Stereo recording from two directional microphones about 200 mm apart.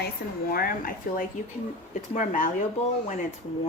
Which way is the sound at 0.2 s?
55° left (ahead or behind).